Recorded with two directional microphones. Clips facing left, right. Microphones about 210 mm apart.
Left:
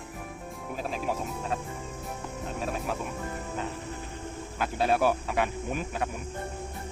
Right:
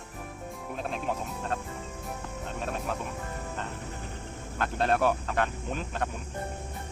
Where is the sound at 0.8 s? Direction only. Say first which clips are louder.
Left 1 dB; 5° left (ahead or behind).